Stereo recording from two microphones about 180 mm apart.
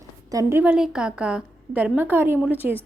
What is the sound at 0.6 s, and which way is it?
A woman's voice, 5° right (ahead or behind).